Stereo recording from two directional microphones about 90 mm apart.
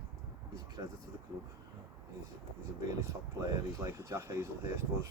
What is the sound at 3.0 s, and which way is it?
Speech, 35° right (ahead or behind).